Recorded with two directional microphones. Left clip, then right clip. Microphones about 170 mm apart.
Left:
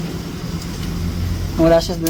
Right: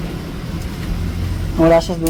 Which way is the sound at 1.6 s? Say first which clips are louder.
Right 1 dB; 15° right (ahead or behind).